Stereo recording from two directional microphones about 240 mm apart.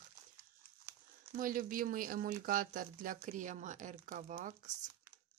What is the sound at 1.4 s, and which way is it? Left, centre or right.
Speech, right.